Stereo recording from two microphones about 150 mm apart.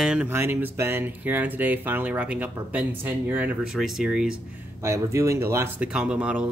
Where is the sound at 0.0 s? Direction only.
5° right (ahead or behind).